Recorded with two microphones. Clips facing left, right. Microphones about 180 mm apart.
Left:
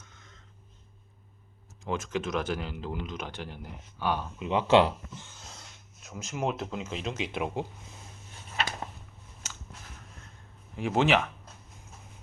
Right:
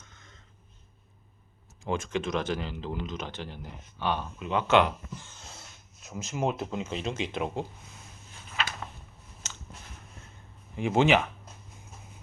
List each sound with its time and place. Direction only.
0.0 s a sound: 5° left (ahead or behind)
1.8 s speech: 5° left (ahead or behind)
4.4 s speech: 30° left (ahead or behind)
6.1 s speech: centre (ahead or behind)
9.4 s a sound: 10° left (ahead or behind)
10.8 s speech: centre (ahead or behind)